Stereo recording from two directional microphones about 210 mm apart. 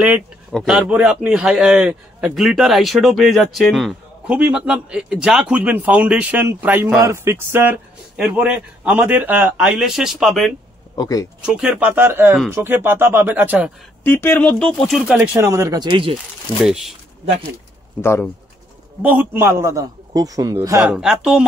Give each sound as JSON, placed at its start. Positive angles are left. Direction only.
{"t": 0.0, "sound": "speech", "side_deg": 0}
{"t": 11.0, "sound": "speech", "side_deg": 15}
{"t": 11.4, "sound": "a man's voice", "side_deg": -5}
{"t": 14.0, "sound": "speech", "side_deg": 10}
{"t": 16.6, "sound": "speech", "side_deg": 0}
{"t": 19.0, "sound": "a man's voice", "side_deg": -10}